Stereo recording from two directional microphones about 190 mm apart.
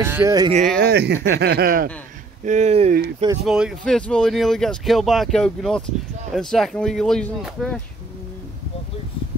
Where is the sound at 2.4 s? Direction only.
40° right (ahead or behind).